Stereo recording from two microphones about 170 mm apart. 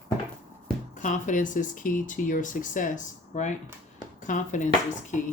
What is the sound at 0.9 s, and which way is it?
Speech, 50° left (ahead or behind).